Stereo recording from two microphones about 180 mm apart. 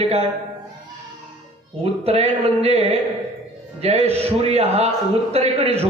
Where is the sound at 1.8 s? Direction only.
35° right (ahead or behind).